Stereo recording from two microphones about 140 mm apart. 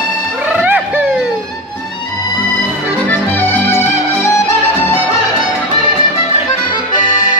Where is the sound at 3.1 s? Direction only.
15° left (ahead or behind).